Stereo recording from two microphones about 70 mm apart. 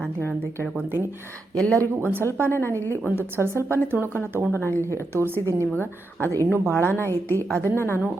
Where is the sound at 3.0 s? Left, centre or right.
Right.